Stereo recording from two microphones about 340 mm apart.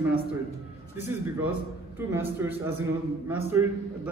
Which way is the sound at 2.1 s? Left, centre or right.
Centre.